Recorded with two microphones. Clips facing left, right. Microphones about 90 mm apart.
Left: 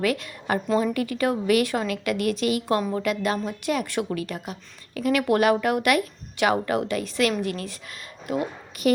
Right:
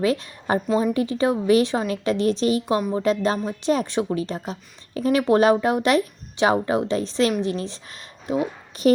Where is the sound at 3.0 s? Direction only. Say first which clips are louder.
Right 4 dB; 30° right (ahead or behind).